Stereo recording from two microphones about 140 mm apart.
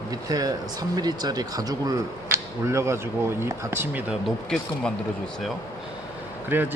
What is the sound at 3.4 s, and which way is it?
Speech, 15° right (ahead or behind).